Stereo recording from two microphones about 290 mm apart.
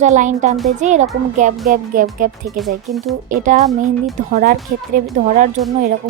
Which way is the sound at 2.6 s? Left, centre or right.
Centre.